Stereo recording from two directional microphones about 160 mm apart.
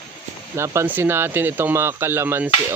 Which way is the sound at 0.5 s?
15° right (ahead or behind).